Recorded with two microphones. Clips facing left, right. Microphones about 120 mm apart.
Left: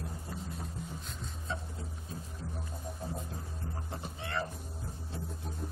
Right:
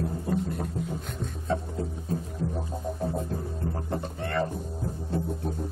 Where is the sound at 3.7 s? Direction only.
50° right (ahead or behind).